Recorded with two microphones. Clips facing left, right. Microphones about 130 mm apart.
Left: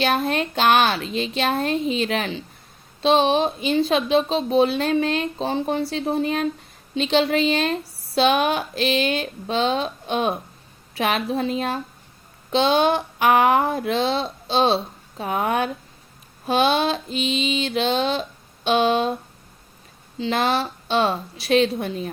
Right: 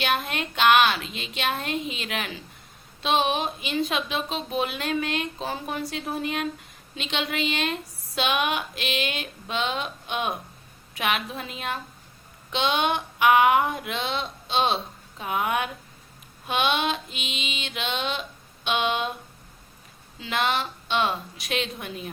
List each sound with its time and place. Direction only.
0.0 s speech: 35° left (ahead or behind)